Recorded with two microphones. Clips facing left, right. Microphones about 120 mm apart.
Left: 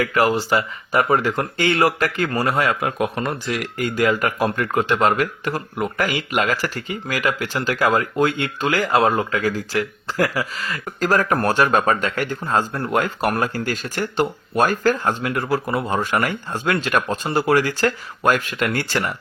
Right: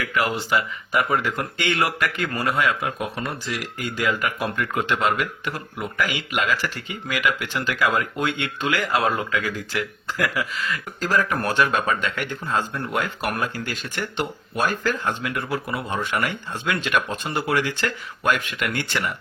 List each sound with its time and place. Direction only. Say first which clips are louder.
0.0 s speech: left 6 dB; 40° left (ahead or behind)
3.0 s speech: left 6 dB; 55° left (ahead or behind); by 19.1 s 40° left (ahead or behind)